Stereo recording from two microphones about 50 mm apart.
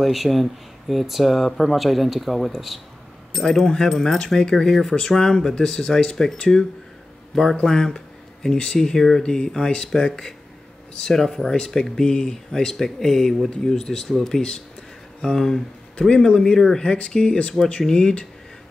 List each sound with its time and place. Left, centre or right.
0.0 s speech: centre
7.6 s speech: centre
16.0 s speech: centre